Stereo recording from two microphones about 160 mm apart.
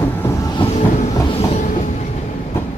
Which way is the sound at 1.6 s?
50° left (ahead or behind).